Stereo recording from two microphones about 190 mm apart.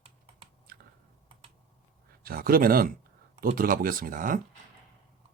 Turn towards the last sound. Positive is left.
turn(degrees=-45)  # may be behind; listen again after turning